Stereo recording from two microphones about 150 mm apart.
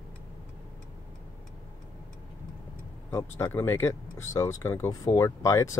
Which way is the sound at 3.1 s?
20° left (ahead or behind).